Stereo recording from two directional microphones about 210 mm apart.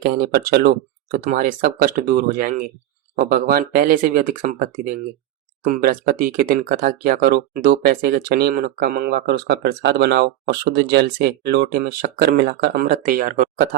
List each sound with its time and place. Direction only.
0.0 s speech: 45° right (ahead or behind)